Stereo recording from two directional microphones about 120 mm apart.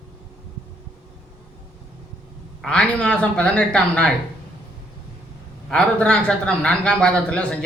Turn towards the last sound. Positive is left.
turn(degrees=10)  # may be behind; listen again after turning